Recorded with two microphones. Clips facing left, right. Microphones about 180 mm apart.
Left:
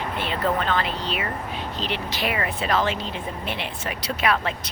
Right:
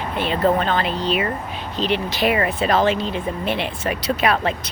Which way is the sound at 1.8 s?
20° right (ahead or behind).